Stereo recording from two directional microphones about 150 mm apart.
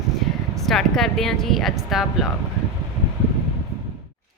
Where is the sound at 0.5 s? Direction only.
Centre (ahead or behind).